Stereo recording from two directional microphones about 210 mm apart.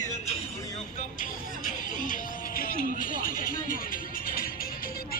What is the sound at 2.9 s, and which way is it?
Speech, 40° left (ahead or behind).